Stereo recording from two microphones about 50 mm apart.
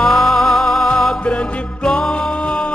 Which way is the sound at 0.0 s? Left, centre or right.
Centre.